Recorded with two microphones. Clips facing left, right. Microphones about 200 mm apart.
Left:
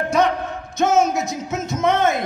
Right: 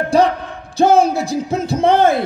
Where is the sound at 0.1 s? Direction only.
30° right (ahead or behind).